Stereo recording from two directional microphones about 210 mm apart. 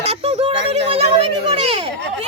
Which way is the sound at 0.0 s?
30° right (ahead or behind).